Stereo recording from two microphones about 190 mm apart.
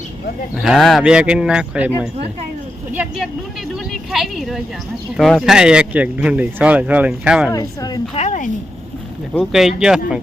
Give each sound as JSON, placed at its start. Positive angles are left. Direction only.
{"t": 0.5, "sound": "speech", "side_deg": 0}
{"t": 2.9, "sound": "speech", "side_deg": -10}
{"t": 7.5, "sound": "a woman's voice", "side_deg": 20}
{"t": 8.1, "sound": "speech", "side_deg": 40}
{"t": 9.3, "sound": "speech", "side_deg": 0}